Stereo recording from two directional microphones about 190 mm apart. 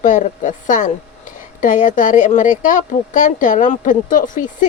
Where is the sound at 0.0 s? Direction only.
45° left (ahead or behind).